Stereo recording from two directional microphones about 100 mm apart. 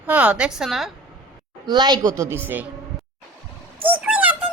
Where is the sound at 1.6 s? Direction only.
45° right (ahead or behind).